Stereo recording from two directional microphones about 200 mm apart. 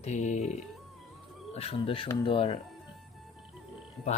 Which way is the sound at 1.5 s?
30° left (ahead or behind).